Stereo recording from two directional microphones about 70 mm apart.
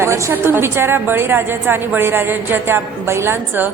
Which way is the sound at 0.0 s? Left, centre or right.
Right.